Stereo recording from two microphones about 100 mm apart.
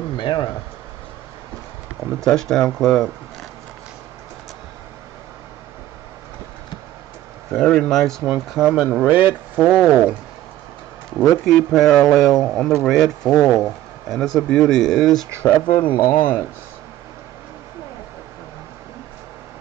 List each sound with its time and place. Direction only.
0.2 s a sound: 55° left (ahead or behind)
2.1 s speech: 5° left (ahead or behind)
7.5 s speech: 10° left (ahead or behind)
8.2 s speech: 5° right (ahead or behind)
11.4 s speech: centre (ahead or behind)
15.4 s speech: 20° left (ahead or behind)